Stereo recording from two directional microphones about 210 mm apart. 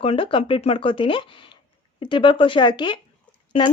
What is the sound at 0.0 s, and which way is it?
Speech, 25° left (ahead or behind).